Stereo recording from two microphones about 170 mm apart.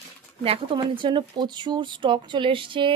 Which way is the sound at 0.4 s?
30° right (ahead or behind).